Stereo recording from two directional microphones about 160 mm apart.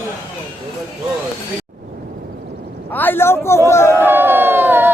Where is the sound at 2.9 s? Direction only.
10° left (ahead or behind).